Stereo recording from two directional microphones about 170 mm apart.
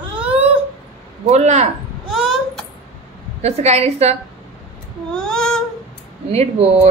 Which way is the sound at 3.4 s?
40° right (ahead or behind).